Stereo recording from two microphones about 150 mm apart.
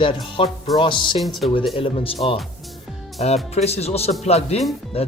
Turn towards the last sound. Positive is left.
turn(degrees=40)  # may be behind; listen again after turning